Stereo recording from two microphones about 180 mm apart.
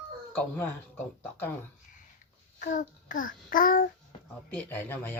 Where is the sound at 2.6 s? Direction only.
45° left (ahead or behind).